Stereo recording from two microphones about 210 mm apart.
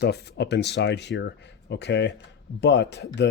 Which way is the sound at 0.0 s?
50° left (ahead or behind).